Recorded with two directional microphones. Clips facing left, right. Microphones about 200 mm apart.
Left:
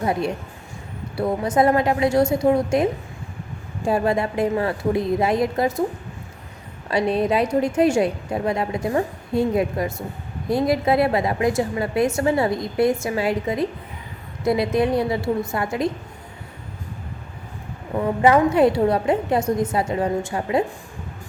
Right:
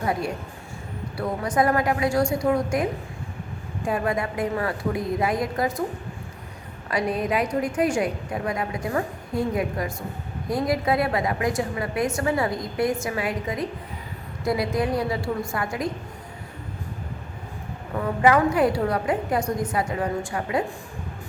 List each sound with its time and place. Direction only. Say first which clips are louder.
0.0 s a woman's voice: left 3 dB; 25° left (ahead or behind)
3.8 s a woman's voice: left 5 dB; 30° left (ahead or behind)
6.9 s a woman's voice: left 4 dB; 30° left (ahead or behind)
17.9 s a woman's voice: left 3 dB; 25° left (ahead or behind)